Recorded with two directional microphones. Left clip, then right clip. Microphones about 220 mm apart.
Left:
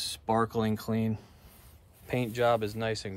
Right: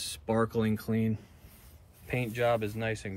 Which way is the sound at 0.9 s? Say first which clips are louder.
Even; 55° left (ahead or behind).